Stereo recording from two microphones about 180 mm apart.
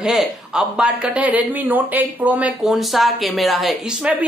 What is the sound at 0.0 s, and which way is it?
Speech, 5° right (ahead or behind).